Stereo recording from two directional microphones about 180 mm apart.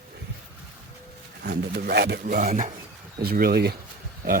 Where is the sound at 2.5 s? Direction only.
40° right (ahead or behind).